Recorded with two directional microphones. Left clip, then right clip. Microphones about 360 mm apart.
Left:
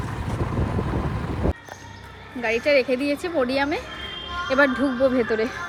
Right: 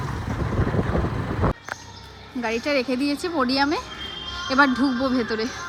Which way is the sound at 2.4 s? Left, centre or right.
Centre.